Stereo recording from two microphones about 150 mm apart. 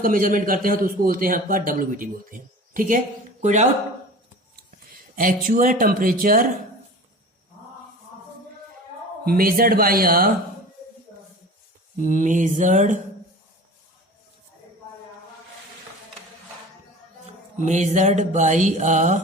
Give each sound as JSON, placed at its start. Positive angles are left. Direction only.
{"t": 0.0, "sound": "a man's voice", "side_deg": -65}
{"t": 3.4, "sound": "mantra", "side_deg": -50}
{"t": 4.5, "sound": "speech", "side_deg": -70}
{"t": 9.2, "sound": "a man's voice", "side_deg": -75}
{"t": 11.9, "sound": "speech", "side_deg": -60}
{"t": 17.6, "sound": "mantra", "side_deg": -50}